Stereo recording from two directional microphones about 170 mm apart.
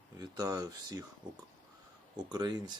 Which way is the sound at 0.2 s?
20° right (ahead or behind).